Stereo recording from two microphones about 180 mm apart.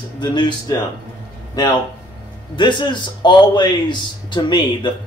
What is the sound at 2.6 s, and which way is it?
A man's voice, 25° left (ahead or behind).